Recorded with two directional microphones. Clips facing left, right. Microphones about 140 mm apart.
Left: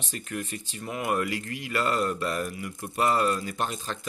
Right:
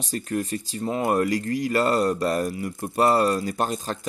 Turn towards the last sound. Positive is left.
turn(degrees=-40)  # may be behind; listen again after turning